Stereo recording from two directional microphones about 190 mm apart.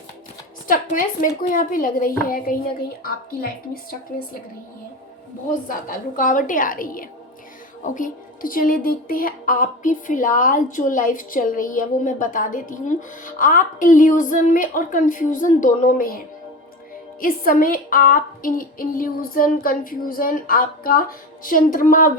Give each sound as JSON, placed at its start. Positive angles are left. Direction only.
{"t": 0.7, "sound": "speech", "side_deg": 45}
{"t": 5.5, "sound": "speech", "side_deg": 45}